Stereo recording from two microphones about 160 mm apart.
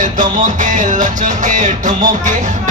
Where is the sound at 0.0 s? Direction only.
55° right (ahead or behind).